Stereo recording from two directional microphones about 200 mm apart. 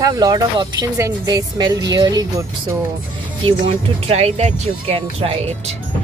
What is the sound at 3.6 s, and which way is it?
Speech, 35° right (ahead or behind).